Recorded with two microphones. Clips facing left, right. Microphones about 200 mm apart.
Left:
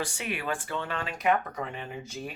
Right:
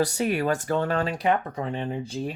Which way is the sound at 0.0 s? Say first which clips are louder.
Right 10 dB; 40° right (ahead or behind).